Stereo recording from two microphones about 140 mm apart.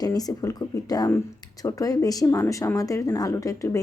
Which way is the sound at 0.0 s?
25° left (ahead or behind).